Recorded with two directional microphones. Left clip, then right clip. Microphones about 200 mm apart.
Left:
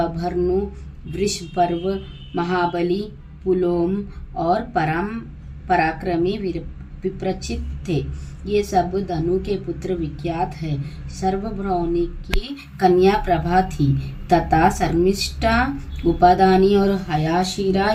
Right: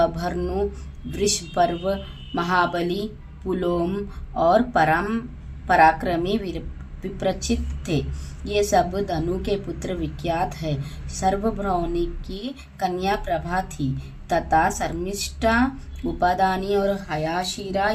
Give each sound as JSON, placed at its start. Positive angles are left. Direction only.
{"t": 0.0, "sound": "a woman's voice", "side_deg": -25}